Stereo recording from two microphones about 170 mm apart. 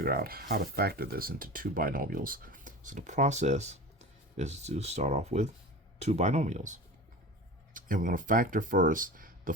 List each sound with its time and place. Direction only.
0.0 s speech: 60° right (ahead or behind)